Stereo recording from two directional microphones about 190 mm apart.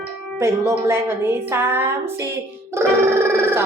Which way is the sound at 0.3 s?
15° right (ahead or behind).